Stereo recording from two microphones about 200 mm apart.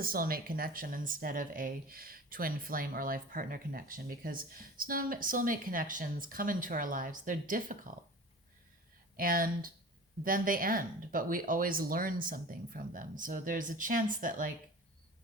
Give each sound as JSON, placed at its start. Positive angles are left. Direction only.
{"t": 0.0, "sound": "speech", "side_deg": -45}
{"t": 9.1, "sound": "speech", "side_deg": -45}